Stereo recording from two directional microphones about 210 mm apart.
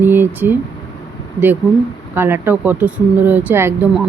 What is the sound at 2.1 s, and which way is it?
Speech, 10° right (ahead or behind).